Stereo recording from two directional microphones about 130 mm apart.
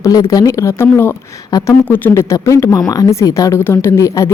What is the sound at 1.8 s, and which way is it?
A woman's voice, 15° left (ahead or behind).